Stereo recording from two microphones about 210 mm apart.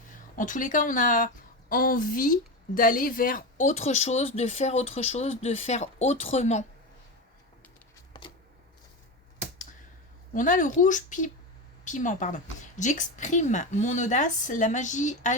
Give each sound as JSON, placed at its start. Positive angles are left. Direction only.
{"t": 0.3, "sound": "a woman's voice", "side_deg": 40}
{"t": 8.1, "sound": "a sound", "side_deg": 20}
{"t": 10.3, "sound": "a woman's voice", "side_deg": 40}